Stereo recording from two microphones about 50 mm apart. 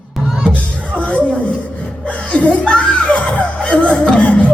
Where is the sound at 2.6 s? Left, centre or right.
Left.